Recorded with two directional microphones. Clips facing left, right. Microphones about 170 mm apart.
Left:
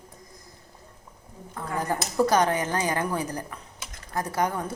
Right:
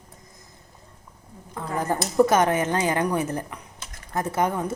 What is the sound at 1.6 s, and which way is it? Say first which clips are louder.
A woman's voice: right 3 dB; 20° right (ahead or behind).